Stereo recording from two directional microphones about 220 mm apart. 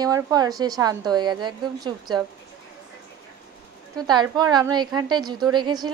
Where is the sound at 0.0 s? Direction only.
15° right (ahead or behind).